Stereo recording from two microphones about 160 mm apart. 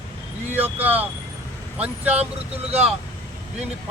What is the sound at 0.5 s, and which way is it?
Speech, 10° right (ahead or behind).